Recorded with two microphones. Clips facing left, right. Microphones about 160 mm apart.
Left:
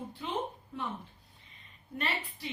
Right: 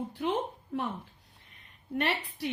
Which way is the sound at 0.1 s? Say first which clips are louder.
Right 3 dB; 80° right.